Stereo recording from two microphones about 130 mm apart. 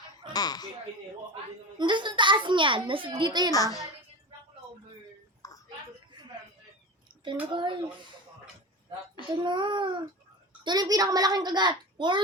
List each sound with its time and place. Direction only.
0.3 s speech: 30° left (ahead or behind)
1.8 s a child's voice: 35° right (ahead or behind)
3.5 s a child's voice: 25° left (ahead or behind)
5.4 s a sound: 25° left (ahead or behind)
7.5 s a child's voice: 40° right (ahead or behind)
9.4 s a child's voice: 35° right (ahead or behind)